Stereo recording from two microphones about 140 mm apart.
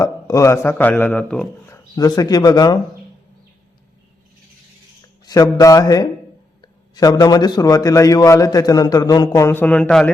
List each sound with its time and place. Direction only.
0.0 s a sound: 25° left (ahead or behind); by 1.5 s 5° left (ahead or behind)
1.6 s speech: 25° left (ahead or behind)
5.2 s a man's voice: 25° left (ahead or behind); by 10.1 s 10° left (ahead or behind)